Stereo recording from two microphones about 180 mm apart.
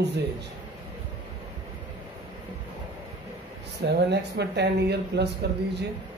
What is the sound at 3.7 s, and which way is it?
Speech, 70° right (ahead or behind).